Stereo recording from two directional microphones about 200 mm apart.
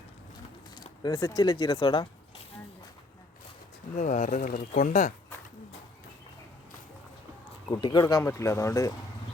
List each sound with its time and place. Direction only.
1.0 s speech: 20° left (ahead or behind)
3.9 s speech: 40° left (ahead or behind)
7.7 s speech: 20° left (ahead or behind)